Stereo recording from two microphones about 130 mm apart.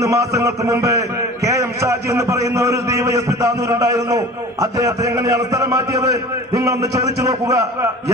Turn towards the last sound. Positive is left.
turn(degrees=-25)  # may be behind; listen again after turning